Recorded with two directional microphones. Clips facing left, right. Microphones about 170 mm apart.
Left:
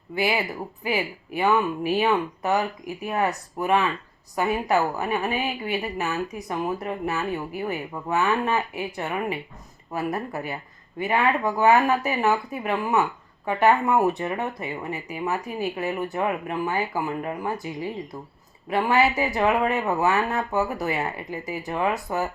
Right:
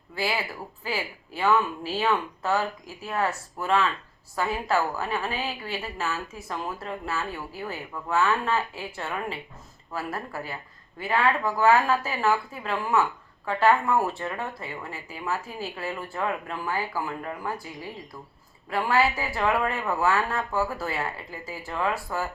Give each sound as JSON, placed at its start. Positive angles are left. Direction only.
{"t": 0.1, "sound": "a woman's voice", "side_deg": 20}